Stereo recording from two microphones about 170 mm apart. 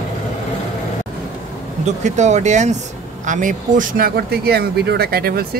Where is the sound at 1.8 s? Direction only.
45° right (ahead or behind).